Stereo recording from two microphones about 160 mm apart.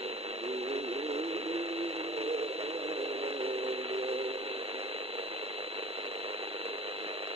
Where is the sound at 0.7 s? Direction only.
40° right (ahead or behind).